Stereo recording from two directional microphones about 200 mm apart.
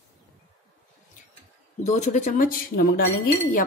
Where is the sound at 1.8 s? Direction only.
35° left (ahead or behind).